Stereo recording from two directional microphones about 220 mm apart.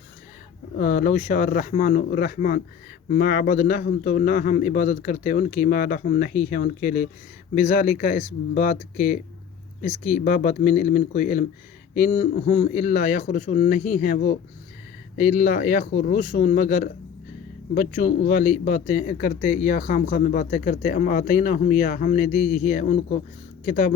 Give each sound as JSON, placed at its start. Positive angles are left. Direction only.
{"t": 0.8, "sound": "speech", "side_deg": 35}